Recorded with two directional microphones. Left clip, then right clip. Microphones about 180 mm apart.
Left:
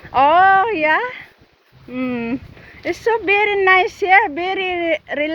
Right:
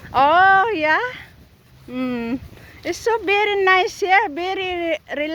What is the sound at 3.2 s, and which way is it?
Speech, 30° right (ahead or behind).